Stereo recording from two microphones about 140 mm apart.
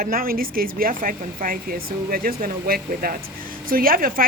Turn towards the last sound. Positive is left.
turn(degrees=-90)